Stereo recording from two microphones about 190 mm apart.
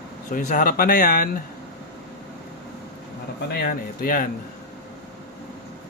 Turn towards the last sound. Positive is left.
turn(degrees=45)  # may be behind; listen again after turning